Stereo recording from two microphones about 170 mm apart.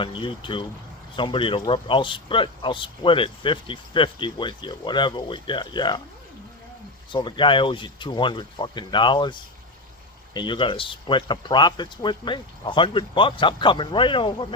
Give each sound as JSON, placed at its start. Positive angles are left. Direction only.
{"t": 0.0, "sound": "speech", "side_deg": 30}
{"t": 7.1, "sound": "speech", "side_deg": 25}